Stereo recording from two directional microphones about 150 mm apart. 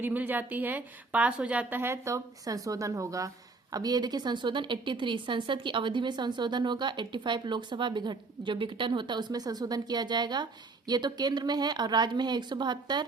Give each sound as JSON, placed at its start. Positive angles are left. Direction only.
{"t": 0.0, "sound": "a woman's voice", "side_deg": -10}